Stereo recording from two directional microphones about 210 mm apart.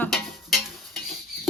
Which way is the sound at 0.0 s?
Centre (ahead or behind).